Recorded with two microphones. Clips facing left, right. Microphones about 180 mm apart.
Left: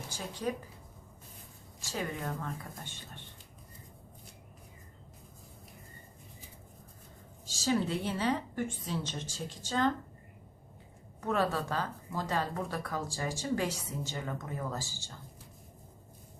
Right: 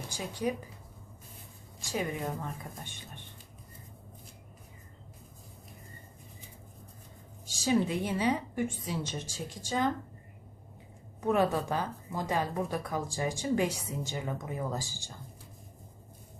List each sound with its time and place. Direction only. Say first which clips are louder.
0.1 s speech: right 3 dB; 15° right (ahead or behind)
1.8 s a woman's voice: right 3 dB; 15° right (ahead or behind)
7.4 s a woman's voice: right 3 dB; 15° right (ahead or behind)
11.2 s a woman's voice: right 4 dB; 15° right (ahead or behind)